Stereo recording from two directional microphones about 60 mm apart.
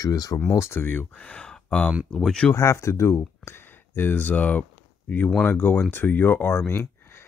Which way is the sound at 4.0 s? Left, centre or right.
Left.